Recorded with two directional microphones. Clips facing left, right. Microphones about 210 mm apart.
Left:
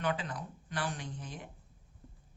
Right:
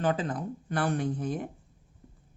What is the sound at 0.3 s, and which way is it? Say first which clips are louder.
Speech: right 8 dB; 55° right (ahead or behind).